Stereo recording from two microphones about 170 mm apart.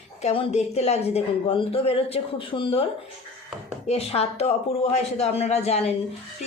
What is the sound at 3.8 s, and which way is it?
Speech, 35° left (ahead or behind).